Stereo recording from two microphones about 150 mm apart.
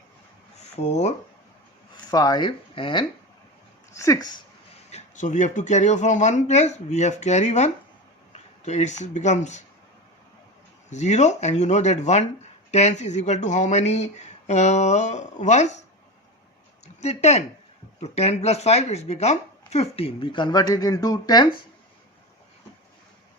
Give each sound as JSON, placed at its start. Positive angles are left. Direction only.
{"t": 0.9, "sound": "speech", "side_deg": 50}
{"t": 2.0, "sound": "speech", "side_deg": 25}
{"t": 3.9, "sound": "speech", "side_deg": 20}
{"t": 4.9, "sound": "speech", "side_deg": 50}
{"t": 10.8, "sound": "speech", "side_deg": 50}
{"t": 16.8, "sound": "speech", "side_deg": 45}